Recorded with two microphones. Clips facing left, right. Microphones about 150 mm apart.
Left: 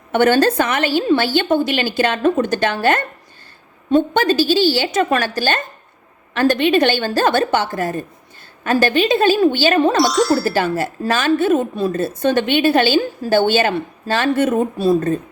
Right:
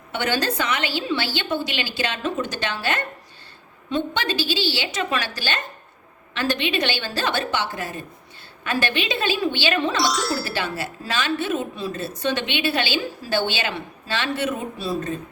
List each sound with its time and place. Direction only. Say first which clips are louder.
0.1 s speech: left 10 dB; 50° left (ahead or behind)
10.1 s speech: left 9 dB; centre (ahead or behind)
10.3 s speech: left 9 dB; 45° left (ahead or behind)